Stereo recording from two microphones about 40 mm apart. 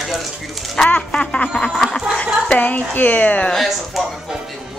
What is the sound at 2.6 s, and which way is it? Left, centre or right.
Speech, left.